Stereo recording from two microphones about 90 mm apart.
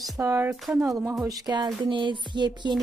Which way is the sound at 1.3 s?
50° right (ahead or behind).